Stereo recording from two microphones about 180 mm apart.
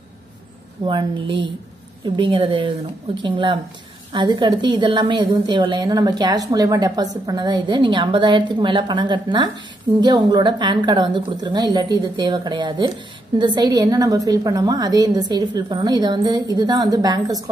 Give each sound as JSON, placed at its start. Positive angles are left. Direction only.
{"t": 0.8, "sound": "a woman's voice", "side_deg": -25}